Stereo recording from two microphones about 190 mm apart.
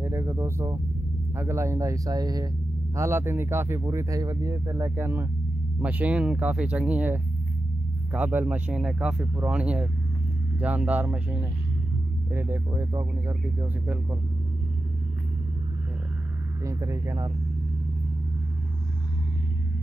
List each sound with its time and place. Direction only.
0.0 s speech: 15° right (ahead or behind)
12.3 s speech: 15° right (ahead or behind)
16.6 s speech: 15° right (ahead or behind)